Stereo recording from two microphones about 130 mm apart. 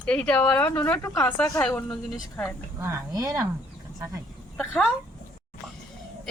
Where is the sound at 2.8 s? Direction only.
25° right (ahead or behind).